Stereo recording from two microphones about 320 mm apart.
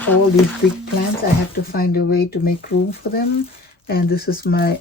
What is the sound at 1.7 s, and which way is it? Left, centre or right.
Speech, left.